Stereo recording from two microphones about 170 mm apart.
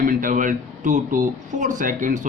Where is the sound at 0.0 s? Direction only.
55° right (ahead or behind).